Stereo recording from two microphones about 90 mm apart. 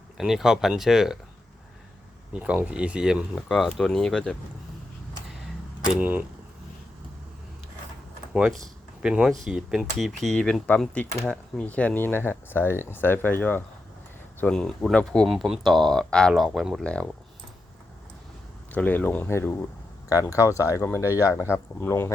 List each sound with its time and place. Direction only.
0.2 s speech: 5° right (ahead or behind)
2.3 s speech: 10° right (ahead or behind)
3.7 s speech: 5° left (ahead or behind)
6.0 s speech: 20° right (ahead or behind)
8.3 s speech: 10° right (ahead or behind); by 13.6 s 20° left (ahead or behind)
14.4 s speech: 10° left (ahead or behind)
15.3 s speech: centre (ahead or behind)
16.8 s speech: 10° left (ahead or behind)
18.7 s speech: 20° left (ahead or behind)